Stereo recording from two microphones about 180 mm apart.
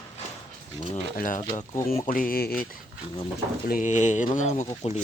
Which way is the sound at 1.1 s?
50° left (ahead or behind).